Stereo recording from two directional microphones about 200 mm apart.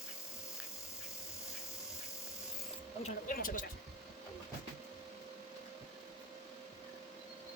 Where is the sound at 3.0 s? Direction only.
45° left (ahead or behind).